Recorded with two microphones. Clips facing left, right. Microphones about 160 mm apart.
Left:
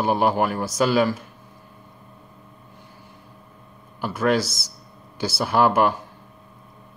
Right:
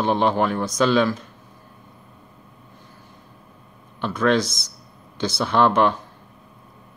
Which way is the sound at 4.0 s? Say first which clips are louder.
Right 1 dB; 10° left (ahead or behind).